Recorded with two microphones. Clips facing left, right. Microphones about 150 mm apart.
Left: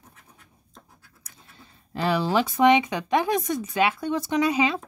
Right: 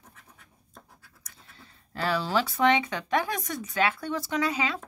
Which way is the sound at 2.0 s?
15° left (ahead or behind).